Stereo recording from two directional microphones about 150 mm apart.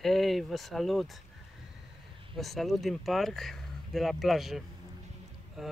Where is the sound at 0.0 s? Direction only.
Centre (ahead or behind).